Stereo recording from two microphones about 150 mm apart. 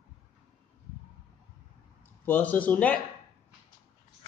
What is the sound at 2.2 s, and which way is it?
Speech, 10° left (ahead or behind).